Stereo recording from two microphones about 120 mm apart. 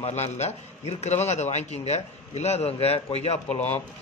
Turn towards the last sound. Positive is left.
turn(degrees=60)  # may be behind; listen again after turning